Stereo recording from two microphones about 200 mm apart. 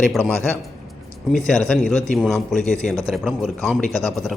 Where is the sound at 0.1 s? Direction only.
5° left (ahead or behind).